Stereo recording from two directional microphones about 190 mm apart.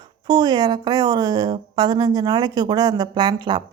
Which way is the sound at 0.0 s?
20° right (ahead or behind).